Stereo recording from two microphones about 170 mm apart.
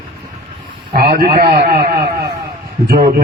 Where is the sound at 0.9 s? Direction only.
60° right (ahead or behind).